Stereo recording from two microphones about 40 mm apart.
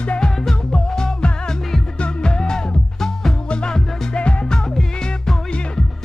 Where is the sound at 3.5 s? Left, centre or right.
Left.